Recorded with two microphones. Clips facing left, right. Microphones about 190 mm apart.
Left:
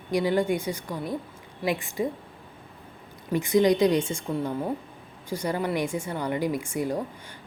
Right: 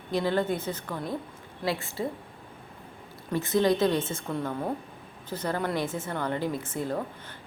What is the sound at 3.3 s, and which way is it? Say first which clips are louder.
Speech: left 3 dB; 15° left (ahead or behind).